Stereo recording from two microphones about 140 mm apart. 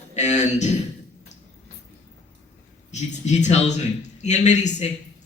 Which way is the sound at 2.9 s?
55° left (ahead or behind).